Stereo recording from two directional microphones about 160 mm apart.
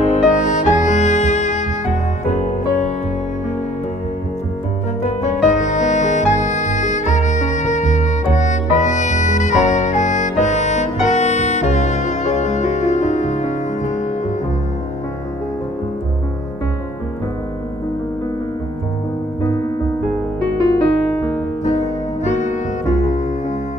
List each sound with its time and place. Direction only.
0.1 s music: 50° left (ahead or behind)
5.0 s music: 45° left (ahead or behind)
20.7 s music: 20° left (ahead or behind)
22.2 s music: 50° left (ahead or behind)